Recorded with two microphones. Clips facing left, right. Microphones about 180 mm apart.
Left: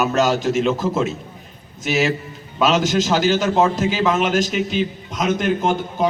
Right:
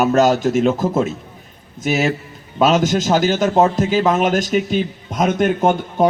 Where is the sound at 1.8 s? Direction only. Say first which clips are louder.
Right 1 dB; 50° right (ahead or behind).